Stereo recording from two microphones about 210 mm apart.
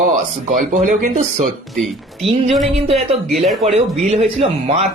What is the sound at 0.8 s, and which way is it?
Speech, 35° right (ahead or behind).